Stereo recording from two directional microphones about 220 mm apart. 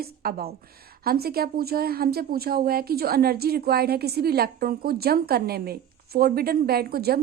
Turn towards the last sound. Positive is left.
turn(degrees=-45)  # may be behind; listen again after turning